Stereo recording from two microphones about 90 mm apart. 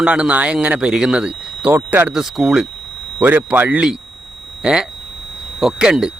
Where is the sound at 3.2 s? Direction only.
20° right (ahead or behind).